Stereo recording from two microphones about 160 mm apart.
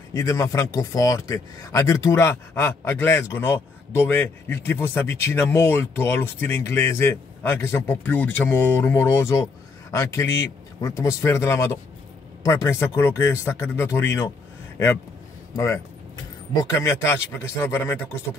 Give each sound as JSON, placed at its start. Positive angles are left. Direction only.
{"t": 0.1, "sound": "speech", "side_deg": 20}
{"t": 15.5, "sound": "speech", "side_deg": 20}